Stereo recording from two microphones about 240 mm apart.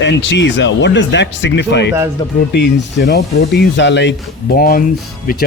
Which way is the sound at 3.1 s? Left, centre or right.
Left.